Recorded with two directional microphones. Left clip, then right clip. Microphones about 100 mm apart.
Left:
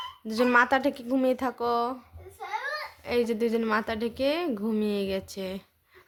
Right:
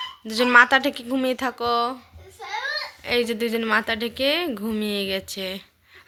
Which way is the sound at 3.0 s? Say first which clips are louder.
Right 3 dB; 20° left (ahead or behind).